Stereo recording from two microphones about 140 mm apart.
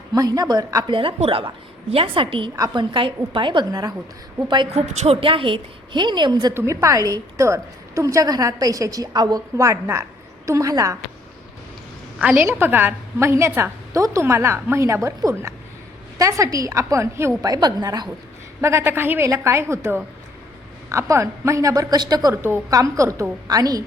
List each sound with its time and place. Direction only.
0.1 s a woman's voice: 25° right (ahead or behind)
0.9 s a woman's voice: 40° right (ahead or behind)
6.5 s a woman's voice: 15° right (ahead or behind)
12.2 s a woman's voice: 15° right (ahead or behind); by 18.1 s 30° right (ahead or behind)
18.6 s a woman's voice: 20° right (ahead or behind)